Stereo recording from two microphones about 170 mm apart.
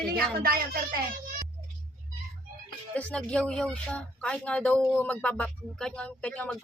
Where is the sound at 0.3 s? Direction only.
60° right (ahead or behind).